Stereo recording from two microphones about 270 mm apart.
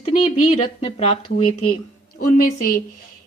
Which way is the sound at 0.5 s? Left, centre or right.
Left.